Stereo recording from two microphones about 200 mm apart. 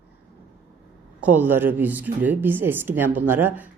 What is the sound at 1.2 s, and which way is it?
Speech, 10° right (ahead or behind).